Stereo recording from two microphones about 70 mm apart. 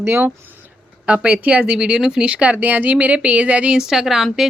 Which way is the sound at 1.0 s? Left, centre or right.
Centre.